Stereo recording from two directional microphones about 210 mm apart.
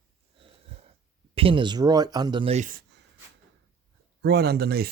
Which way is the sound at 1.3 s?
25° right (ahead or behind).